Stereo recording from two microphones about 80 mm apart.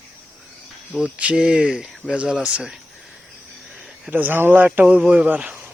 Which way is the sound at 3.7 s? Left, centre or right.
Right.